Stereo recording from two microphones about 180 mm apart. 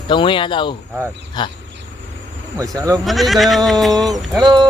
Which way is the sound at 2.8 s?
20° right (ahead or behind).